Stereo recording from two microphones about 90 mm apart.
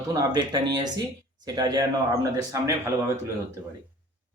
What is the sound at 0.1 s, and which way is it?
Speech, 45° right (ahead or behind).